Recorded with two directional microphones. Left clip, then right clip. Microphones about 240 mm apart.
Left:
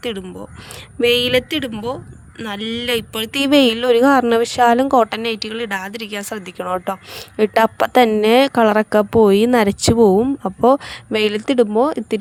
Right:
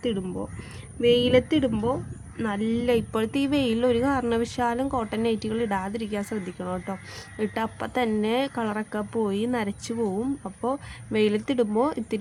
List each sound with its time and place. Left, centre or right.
1.0 s a woman's voice: left